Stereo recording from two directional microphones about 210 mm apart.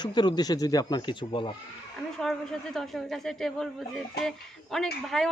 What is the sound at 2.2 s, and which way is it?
A man's voice, centre (ahead or behind).